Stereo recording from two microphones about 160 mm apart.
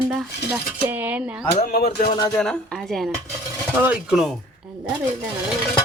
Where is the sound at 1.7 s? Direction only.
80° left.